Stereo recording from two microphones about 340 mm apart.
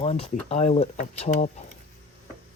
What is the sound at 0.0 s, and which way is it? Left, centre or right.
Speech, centre.